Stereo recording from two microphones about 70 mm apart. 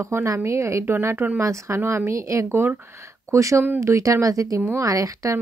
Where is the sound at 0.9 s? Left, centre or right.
Right.